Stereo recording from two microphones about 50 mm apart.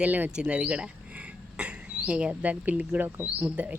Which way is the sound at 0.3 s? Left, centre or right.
Centre.